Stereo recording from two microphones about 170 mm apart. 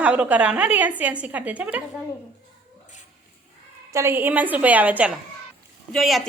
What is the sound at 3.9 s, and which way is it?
A woman's voice, 15° right (ahead or behind).